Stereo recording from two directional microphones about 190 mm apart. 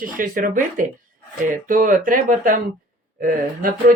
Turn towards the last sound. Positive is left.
turn(degrees=-45)  # may be behind; listen again after turning